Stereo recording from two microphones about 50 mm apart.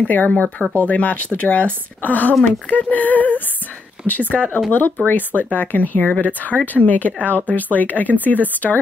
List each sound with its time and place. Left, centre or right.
0.0 s speech: left